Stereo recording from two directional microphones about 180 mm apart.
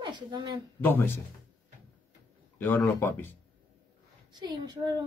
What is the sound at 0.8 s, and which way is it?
Speech, 10° left (ahead or behind).